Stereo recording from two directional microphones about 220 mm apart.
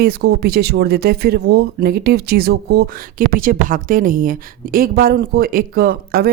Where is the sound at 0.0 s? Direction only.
45° right (ahead or behind).